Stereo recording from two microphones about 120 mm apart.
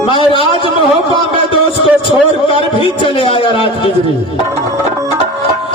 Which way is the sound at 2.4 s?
50° left (ahead or behind).